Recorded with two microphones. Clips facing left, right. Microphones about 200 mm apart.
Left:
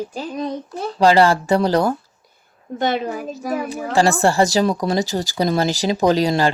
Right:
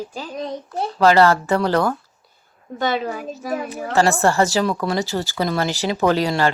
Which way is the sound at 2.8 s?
45° left (ahead or behind).